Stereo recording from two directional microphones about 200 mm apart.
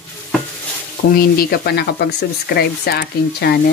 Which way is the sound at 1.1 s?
50° left (ahead or behind).